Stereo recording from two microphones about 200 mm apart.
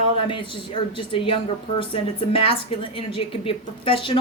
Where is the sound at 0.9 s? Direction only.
25° left (ahead or behind).